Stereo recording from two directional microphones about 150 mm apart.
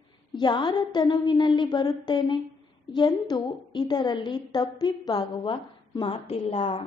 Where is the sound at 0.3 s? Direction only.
30° left (ahead or behind).